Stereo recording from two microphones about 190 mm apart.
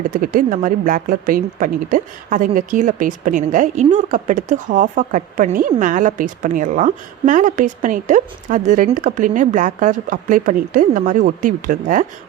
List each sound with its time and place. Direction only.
0.1 s a woman's voice: 45° right (ahead or behind)